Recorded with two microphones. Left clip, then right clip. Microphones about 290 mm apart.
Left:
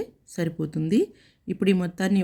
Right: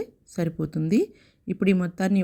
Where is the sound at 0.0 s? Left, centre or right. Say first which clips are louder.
Even; centre.